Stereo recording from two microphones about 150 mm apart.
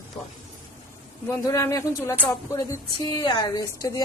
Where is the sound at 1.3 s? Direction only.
20° left (ahead or behind).